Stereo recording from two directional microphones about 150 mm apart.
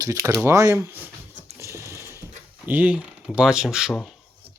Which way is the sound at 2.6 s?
10° right (ahead or behind).